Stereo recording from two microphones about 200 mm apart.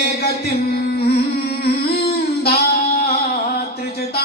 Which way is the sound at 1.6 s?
50° left (ahead or behind).